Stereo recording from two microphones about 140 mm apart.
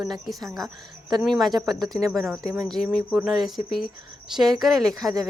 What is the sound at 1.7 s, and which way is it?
Speech, 30° right (ahead or behind).